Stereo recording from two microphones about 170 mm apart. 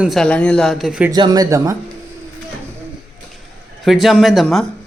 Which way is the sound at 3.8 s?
Centre (ahead or behind).